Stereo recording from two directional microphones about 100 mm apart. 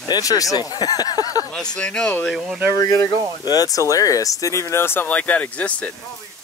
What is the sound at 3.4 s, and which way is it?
Speech, 40° left (ahead or behind).